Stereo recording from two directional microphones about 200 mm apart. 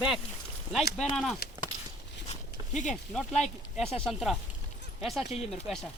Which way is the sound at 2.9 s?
5° left (ahead or behind).